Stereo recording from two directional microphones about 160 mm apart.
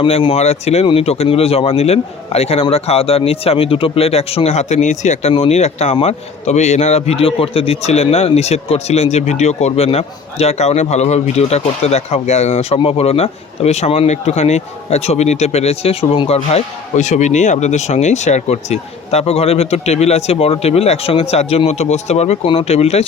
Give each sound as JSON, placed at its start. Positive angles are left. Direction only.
{"t": 0.0, "sound": "a man's voice", "side_deg": 35}